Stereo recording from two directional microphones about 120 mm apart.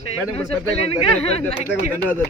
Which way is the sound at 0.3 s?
55° left (ahead or behind).